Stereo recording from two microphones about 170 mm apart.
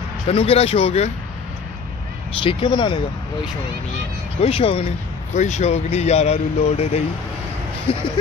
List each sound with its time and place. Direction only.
0.3 s a man's voice: 35° left (ahead or behind)
2.4 s speech: 30° left (ahead or behind)
4.4 s a man's voice: 35° left (ahead or behind)